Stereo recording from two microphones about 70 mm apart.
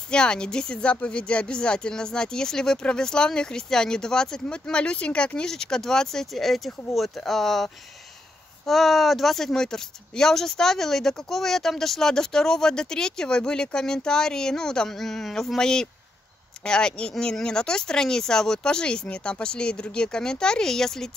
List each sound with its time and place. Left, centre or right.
0.1 s speech: centre